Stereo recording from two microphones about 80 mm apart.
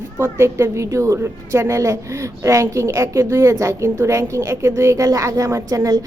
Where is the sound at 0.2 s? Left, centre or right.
Right.